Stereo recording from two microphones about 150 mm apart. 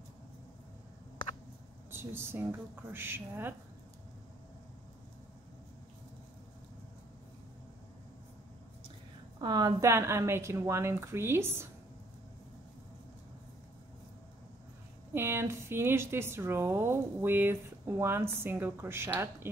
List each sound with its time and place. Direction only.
1.9 s speech: 15° right (ahead or behind)
9.4 s speech: 25° right (ahead or behind)
15.1 s speech: 15° right (ahead or behind)